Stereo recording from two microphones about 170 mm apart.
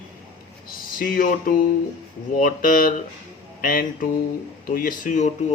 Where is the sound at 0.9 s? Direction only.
55° left (ahead or behind).